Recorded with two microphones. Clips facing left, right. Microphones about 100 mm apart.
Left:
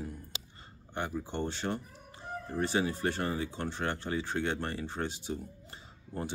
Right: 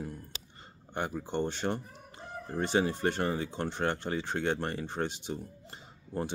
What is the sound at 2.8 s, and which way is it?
Speech, 35° right (ahead or behind).